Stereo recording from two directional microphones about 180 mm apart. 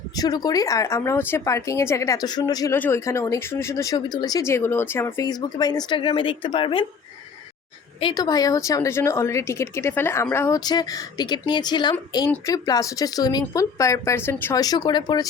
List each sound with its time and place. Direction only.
0.2 s speech: 20° left (ahead or behind)
7.9 s speech: 25° left (ahead or behind)